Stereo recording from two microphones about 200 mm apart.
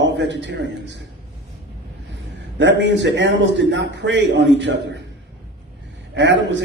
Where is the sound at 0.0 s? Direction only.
65° right (ahead or behind).